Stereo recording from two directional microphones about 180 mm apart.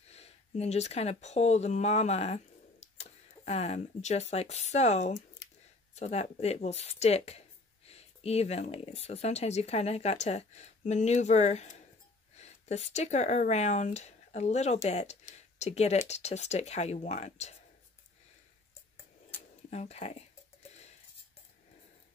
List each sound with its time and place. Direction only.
0.1 s speech: 35° left (ahead or behind)
19.7 s speech: 40° left (ahead or behind)